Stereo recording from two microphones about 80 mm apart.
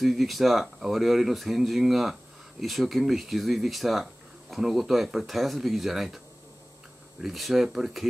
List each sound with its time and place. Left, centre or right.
0.0 s speech: centre